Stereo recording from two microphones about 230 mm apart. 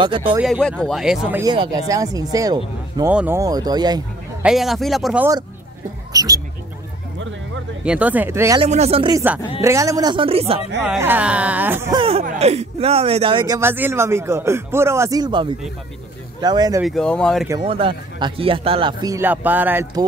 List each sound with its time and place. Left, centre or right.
0.0 s speech: right
0.4 s speech: centre
1.4 s speech: centre
4.4 s speech: centre
7.8 s speech: centre
8.5 s speech: right
10.9 s speech: centre
12.0 s speech: right
13.6 s speech: centre
16.8 s speech: centre
17.5 s speech: right